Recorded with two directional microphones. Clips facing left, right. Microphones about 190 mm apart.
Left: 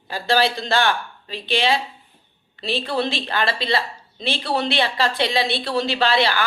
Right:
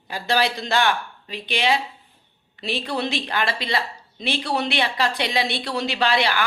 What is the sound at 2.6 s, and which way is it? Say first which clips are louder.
Speech: left 3 dB; 30° left (ahead or behind).